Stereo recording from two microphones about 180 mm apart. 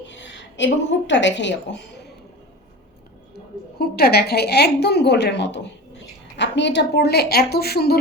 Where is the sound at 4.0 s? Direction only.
60° left (ahead or behind).